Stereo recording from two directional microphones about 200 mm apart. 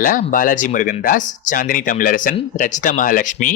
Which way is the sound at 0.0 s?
40° left (ahead or behind).